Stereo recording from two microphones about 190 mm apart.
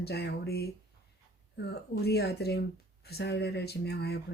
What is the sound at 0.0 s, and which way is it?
Speech, 55° left (ahead or behind).